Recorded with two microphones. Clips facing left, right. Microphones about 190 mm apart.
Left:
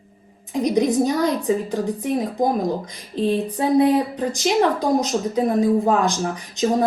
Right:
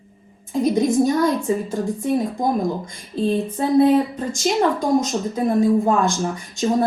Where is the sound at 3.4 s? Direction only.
15° left (ahead or behind).